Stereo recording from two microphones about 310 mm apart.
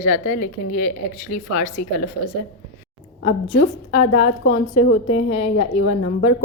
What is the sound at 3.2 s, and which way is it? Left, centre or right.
A woman's voice, left.